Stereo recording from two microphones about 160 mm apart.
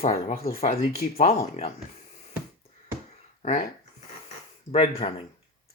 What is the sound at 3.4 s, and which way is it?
Speech, 55° left (ahead or behind).